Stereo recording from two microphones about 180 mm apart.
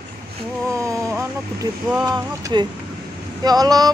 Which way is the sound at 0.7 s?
15° right (ahead or behind).